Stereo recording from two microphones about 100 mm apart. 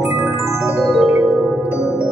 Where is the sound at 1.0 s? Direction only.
5° right (ahead or behind).